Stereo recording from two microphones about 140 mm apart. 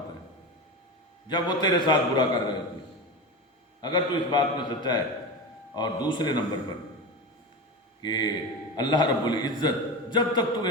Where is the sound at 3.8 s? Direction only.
35° left (ahead or behind).